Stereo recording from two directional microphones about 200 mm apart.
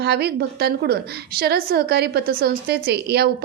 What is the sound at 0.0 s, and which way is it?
A woman's voice, 55° right (ahead or behind).